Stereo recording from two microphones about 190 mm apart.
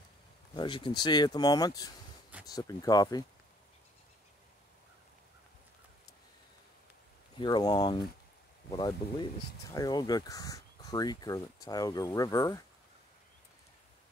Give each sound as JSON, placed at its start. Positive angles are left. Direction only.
{"t": 0.6, "sound": "speech", "side_deg": 25}
{"t": 7.3, "sound": "speech", "side_deg": 20}